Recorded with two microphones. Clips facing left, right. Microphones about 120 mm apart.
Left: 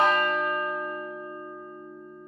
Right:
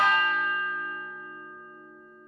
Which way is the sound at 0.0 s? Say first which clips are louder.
Left 2 dB; 35° left (ahead or behind).